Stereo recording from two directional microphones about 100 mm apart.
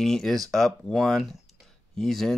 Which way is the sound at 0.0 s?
5° left (ahead or behind).